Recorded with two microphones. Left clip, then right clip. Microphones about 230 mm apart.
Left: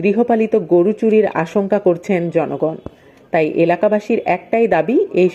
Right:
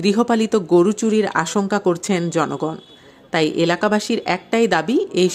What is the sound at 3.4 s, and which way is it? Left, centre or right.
Speech, centre.